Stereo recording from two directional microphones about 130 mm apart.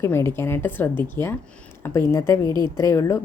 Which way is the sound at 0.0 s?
20° left (ahead or behind).